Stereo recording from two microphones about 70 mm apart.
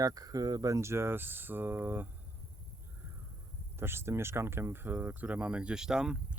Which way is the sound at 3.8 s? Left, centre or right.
Right.